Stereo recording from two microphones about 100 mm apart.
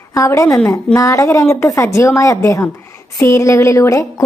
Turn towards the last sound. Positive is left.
turn(degrees=30)  # may be behind; listen again after turning